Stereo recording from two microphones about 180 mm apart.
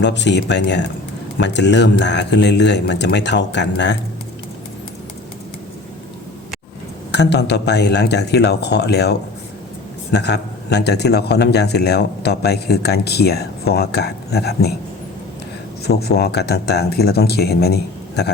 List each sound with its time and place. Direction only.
0.0 s speech: 75° left (ahead or behind)
7.1 s a man's voice: 70° left (ahead or behind)
15.9 s a man's voice: 60° left (ahead or behind)